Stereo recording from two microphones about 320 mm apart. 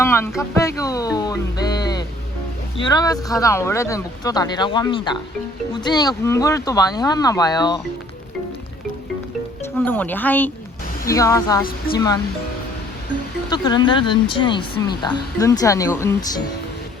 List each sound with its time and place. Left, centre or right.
0.0 s speech: centre
9.7 s speech: centre
13.5 s speech: centre